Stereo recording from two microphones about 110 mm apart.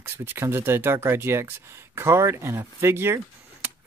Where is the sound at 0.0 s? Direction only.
20° right (ahead or behind).